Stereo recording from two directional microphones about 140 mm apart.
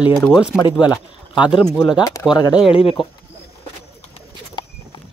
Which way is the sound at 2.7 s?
40° left (ahead or behind).